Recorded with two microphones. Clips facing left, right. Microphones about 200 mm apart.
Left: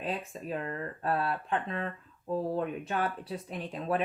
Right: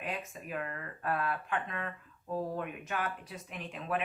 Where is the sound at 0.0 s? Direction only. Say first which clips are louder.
Left 4 dB; 30° left (ahead or behind).